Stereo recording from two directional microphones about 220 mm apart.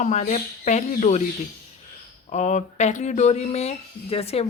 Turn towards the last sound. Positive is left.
turn(degrees=25)  # may be behind; listen again after turning